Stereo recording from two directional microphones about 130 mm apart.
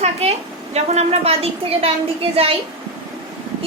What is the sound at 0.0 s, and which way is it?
A woman's voice, 55° right (ahead or behind).